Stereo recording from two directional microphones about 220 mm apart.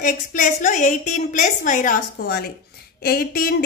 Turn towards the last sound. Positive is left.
turn(degrees=45)  # may be behind; listen again after turning